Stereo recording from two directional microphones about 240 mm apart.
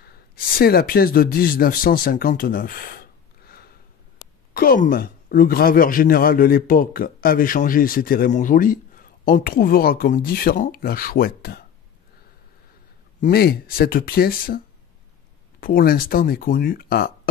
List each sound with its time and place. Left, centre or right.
0.6 s speech: left
13.2 s speech: left
15.6 s speech: left